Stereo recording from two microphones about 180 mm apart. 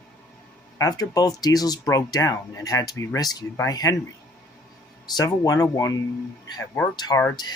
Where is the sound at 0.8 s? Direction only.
20° left (ahead or behind).